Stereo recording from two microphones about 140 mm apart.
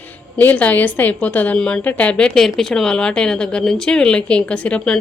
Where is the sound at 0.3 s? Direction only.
10° left (ahead or behind).